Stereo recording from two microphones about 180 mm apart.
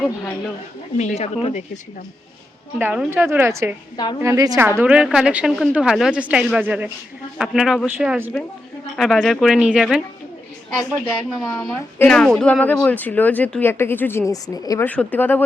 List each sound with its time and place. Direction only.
0.9 s speech: 40° left (ahead or behind)
2.7 s a woman's voice: 5° right (ahead or behind)
3.9 s a woman's voice: 25° left (ahead or behind)
4.2 s a woman's voice: 15° right (ahead or behind)
10.8 s speech: 15° left (ahead or behind)
14.8 s speech: 10° left (ahead or behind)